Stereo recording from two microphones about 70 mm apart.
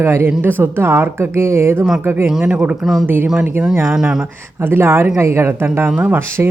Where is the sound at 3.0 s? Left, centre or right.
Right.